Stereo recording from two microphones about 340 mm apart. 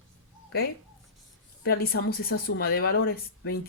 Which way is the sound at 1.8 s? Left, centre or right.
Left.